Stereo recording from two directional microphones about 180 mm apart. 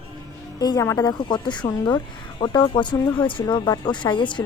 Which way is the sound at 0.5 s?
20° left (ahead or behind).